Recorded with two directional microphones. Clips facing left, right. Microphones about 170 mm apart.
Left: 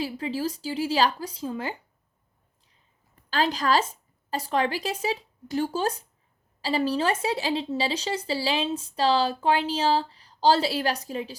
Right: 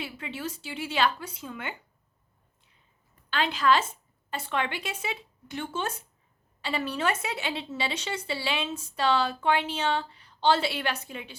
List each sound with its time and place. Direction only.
0.0 s speech: 35° left (ahead or behind)
3.2 s a woman's voice: 35° left (ahead or behind)